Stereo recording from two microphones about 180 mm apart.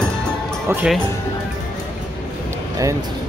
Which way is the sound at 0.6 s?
10° right (ahead or behind).